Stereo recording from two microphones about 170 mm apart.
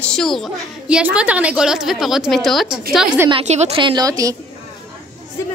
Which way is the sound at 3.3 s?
35° right (ahead or behind).